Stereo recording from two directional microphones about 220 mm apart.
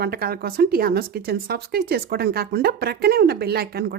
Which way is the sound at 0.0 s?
45° right (ahead or behind).